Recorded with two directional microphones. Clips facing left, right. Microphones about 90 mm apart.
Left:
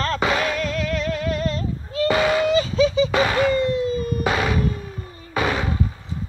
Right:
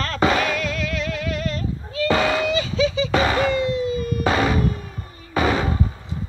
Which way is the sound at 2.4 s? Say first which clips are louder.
Left 3 dB; 40° left (ahead or behind).